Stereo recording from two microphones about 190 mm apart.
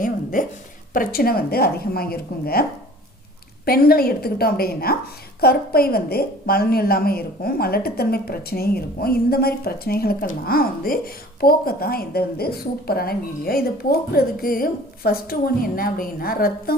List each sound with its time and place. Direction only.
0.0 s a woman's voice: 45° left (ahead or behind)
3.7 s a woman's voice: 55° left (ahead or behind)